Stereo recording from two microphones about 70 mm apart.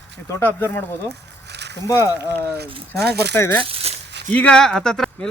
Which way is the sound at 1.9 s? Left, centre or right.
Left.